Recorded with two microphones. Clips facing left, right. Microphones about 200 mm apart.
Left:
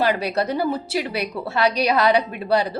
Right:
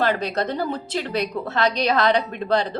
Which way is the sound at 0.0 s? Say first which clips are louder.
Left 1 dB; 10° left (ahead or behind).